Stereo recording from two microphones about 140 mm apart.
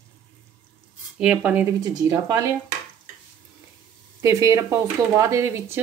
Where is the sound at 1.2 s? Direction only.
10° right (ahead or behind).